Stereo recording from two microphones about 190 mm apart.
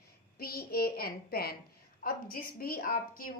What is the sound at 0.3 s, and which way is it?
A woman's voice, 50° left (ahead or behind).